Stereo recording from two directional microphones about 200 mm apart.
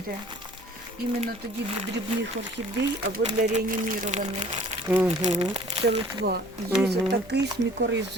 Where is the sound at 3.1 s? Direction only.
40° right (ahead or behind).